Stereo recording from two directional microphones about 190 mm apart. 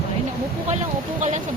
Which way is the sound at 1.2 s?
40° right (ahead or behind).